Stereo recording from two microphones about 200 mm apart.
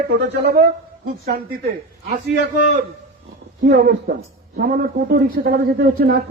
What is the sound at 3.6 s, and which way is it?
A man's voice, 50° right (ahead or behind).